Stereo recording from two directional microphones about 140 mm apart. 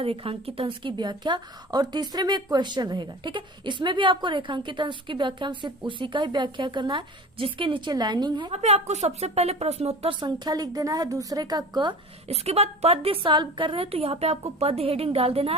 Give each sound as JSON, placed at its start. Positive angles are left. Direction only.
{"t": 0.0, "sound": "a woman's voice", "side_deg": -40}
{"t": 8.5, "sound": "a woman's voice", "side_deg": -50}
{"t": 10.2, "sound": "a woman's voice", "side_deg": -30}
{"t": 12.3, "sound": "a woman's voice", "side_deg": -45}